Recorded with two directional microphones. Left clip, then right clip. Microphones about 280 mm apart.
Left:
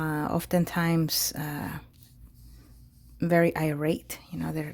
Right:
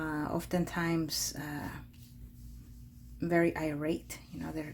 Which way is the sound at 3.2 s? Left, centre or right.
Left.